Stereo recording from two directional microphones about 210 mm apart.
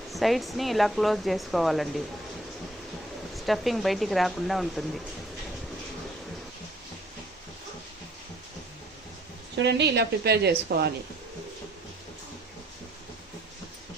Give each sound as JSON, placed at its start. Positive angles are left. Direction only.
{"t": 0.1, "sound": "speech", "side_deg": 0}
{"t": 3.3, "sound": "speech", "side_deg": 0}
{"t": 9.6, "sound": "a woman's voice", "side_deg": -55}